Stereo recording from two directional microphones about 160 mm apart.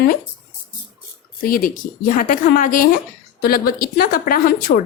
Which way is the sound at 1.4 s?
65° left (ahead or behind).